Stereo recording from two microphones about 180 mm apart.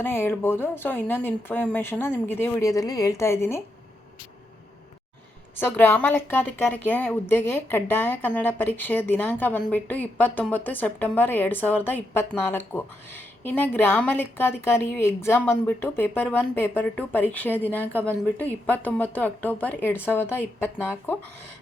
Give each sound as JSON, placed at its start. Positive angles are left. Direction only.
{"t": 0.0, "sound": "a woman's voice", "side_deg": 10}
{"t": 5.5, "sound": "a woman's voice", "side_deg": 10}